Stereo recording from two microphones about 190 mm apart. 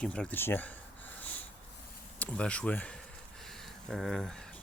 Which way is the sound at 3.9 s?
Centre (ahead or behind).